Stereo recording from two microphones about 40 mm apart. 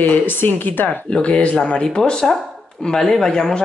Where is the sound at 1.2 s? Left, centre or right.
Left.